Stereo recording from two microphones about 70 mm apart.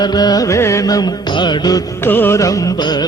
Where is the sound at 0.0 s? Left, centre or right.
Left.